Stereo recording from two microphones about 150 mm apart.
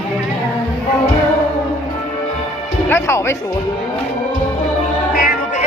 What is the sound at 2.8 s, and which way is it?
Music, 15° left (ahead or behind).